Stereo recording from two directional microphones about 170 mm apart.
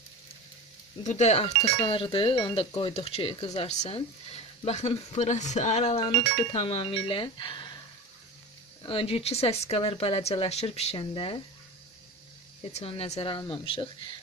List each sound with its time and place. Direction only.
1.0 s speech: 40° left (ahead or behind)
8.8 s speech: 35° left (ahead or behind)
12.7 s speech: 35° left (ahead or behind)